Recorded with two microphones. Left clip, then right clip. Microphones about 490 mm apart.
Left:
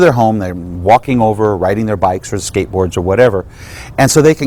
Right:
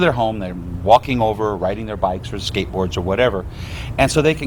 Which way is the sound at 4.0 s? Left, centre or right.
Left.